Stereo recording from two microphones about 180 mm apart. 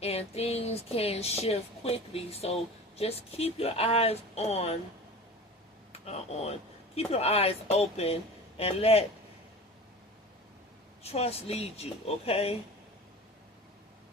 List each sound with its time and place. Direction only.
0.0 s speech: 35° left (ahead or behind)
5.9 s speech: 35° left (ahead or behind)
11.0 s speech: 35° left (ahead or behind)